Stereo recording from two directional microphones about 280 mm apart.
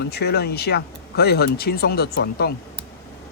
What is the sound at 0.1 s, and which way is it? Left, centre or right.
Speech, left.